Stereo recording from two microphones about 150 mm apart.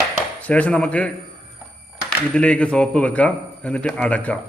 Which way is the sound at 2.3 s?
10° left (ahead or behind).